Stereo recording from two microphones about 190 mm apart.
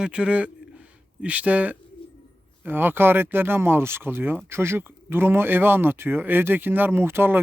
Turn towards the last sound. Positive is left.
turn(degrees=-10)  # may be behind; listen again after turning